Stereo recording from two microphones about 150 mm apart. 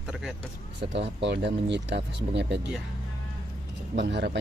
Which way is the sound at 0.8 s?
45° right (ahead or behind).